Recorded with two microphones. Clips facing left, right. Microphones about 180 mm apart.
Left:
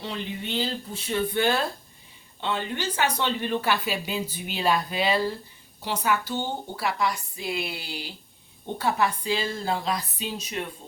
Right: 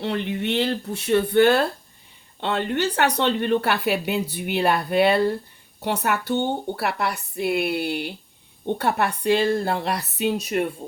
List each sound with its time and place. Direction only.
0.0 s speech: 65° right (ahead or behind)